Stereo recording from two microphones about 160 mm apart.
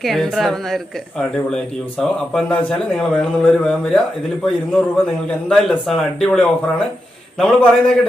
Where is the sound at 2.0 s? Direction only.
5° left (ahead or behind).